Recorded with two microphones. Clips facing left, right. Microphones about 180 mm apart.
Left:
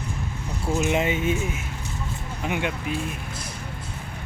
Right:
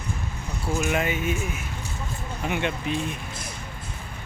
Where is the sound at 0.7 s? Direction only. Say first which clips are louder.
Left 2 dB; 25° left (ahead or behind).